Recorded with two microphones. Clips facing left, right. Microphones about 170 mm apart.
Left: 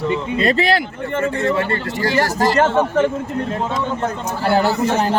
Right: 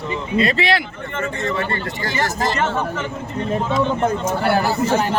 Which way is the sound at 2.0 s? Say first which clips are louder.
Left 6 dB; 35° left (ahead or behind).